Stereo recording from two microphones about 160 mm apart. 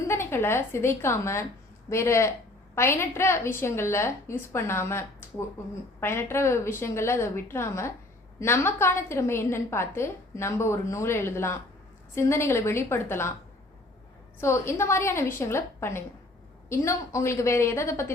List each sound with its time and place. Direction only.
0.1 s a woman's voice: 15° left (ahead or behind)
14.4 s a woman's voice: 15° left (ahead or behind)